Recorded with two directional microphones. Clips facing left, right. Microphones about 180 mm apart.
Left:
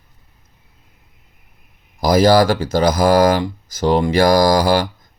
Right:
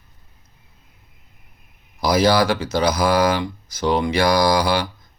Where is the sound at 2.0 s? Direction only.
45° left (ahead or behind).